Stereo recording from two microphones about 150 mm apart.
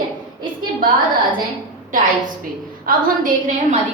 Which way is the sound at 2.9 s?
70° right (ahead or behind).